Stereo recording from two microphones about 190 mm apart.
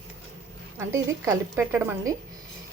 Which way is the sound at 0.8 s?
15° right (ahead or behind).